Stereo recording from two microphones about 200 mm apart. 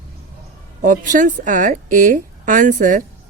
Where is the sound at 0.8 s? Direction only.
40° right (ahead or behind).